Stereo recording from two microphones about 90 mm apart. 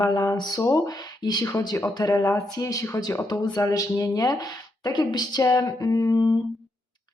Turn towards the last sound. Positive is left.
turn(degrees=45)  # may be behind; listen again after turning